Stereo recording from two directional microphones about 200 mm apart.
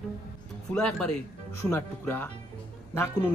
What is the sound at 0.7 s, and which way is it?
Speech, 5° left (ahead or behind).